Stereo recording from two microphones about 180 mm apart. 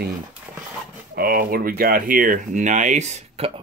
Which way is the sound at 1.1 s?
55° right (ahead or behind).